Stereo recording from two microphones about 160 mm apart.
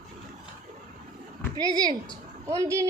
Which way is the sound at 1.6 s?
25° right (ahead or behind).